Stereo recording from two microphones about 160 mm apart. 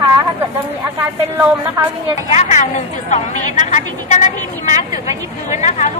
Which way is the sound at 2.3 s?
45° left (ahead or behind).